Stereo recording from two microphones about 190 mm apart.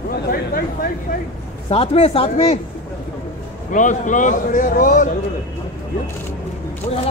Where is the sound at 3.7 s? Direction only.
40° left (ahead or behind).